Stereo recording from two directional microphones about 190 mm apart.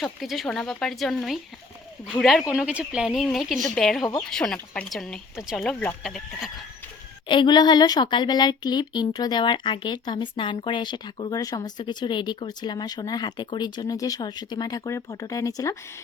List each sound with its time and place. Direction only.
0.0 s a woman's voice: centre (ahead or behind)
7.3 s speech: 25° left (ahead or behind)